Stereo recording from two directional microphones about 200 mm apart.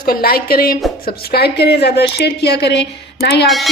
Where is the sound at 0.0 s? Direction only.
45° left (ahead or behind).